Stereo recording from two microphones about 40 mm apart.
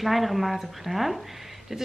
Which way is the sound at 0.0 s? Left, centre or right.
Centre.